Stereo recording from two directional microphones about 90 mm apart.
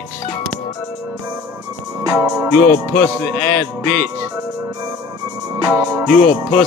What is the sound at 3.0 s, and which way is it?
Speech, 15° left (ahead or behind).